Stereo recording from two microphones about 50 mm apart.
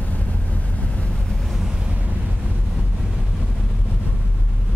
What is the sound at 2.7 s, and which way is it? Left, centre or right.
Vehicle, centre.